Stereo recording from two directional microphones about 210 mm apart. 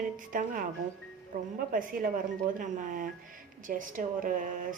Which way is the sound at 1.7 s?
40° right (ahead or behind).